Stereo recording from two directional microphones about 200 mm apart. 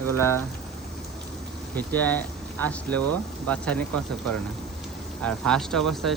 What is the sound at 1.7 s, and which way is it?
Speech, 10° left (ahead or behind).